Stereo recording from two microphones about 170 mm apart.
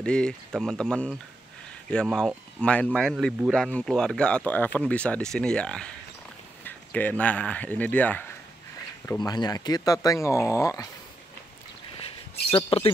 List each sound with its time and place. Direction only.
0.0 s speech: 5° left (ahead or behind)
9.2 s speech: 25° left (ahead or behind)
12.4 s speech: 35° left (ahead or behind)